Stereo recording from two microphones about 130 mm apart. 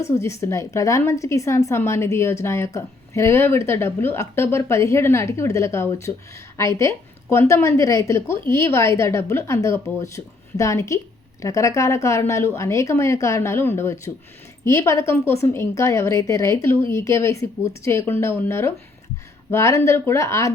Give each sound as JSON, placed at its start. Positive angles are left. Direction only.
{"t": 0.0, "sound": "a woman's voice", "side_deg": 20}